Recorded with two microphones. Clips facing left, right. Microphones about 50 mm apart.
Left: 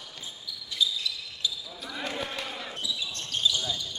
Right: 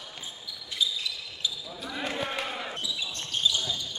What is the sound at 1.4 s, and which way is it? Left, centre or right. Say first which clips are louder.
Basketball bounce: even; right.